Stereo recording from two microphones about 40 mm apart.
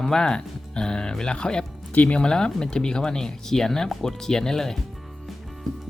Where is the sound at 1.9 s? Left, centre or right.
Left.